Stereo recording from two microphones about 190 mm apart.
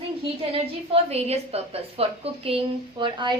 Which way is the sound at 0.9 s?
30° right (ahead or behind).